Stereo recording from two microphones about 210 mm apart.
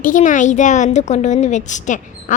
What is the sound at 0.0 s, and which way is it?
A woman's voice, 40° left (ahead or behind).